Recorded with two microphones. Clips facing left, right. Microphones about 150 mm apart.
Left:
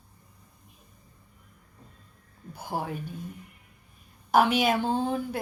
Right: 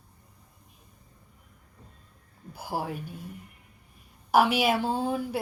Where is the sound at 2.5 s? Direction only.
5° right (ahead or behind).